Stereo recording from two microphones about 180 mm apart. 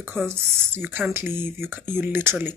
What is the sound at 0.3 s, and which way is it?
Speech, 10° right (ahead or behind).